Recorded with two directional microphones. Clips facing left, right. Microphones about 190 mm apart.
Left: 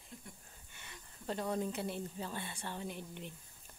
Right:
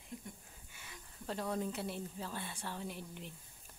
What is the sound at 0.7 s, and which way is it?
Speech, 5° right (ahead or behind).